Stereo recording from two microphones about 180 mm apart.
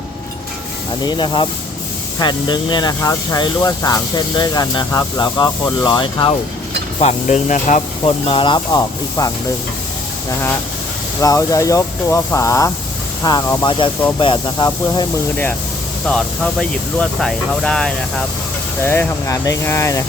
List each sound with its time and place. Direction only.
1.0 s speech: 25° left (ahead or behind)
7.0 s speech: 40° left (ahead or behind)
8.0 s speech: 30° left (ahead or behind)
11.2 s speech: 15° left (ahead or behind)
16.0 s speech: 5° left (ahead or behind)
18.9 s speech: 15° left (ahead or behind)